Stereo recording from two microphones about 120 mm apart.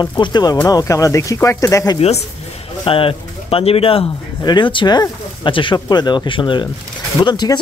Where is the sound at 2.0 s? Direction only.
60° left (ahead or behind).